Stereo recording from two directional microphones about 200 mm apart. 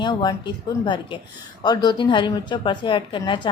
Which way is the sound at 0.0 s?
20° left (ahead or behind).